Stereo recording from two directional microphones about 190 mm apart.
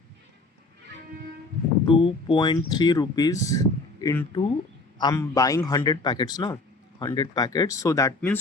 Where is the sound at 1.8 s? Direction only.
25° left (ahead or behind).